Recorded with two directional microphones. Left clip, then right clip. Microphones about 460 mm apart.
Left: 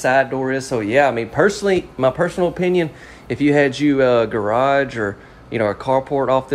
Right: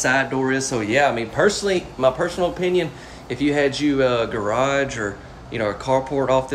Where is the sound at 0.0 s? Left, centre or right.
Centre.